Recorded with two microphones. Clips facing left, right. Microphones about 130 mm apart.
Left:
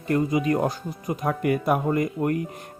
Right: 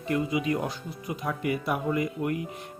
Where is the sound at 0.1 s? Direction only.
45° left (ahead or behind).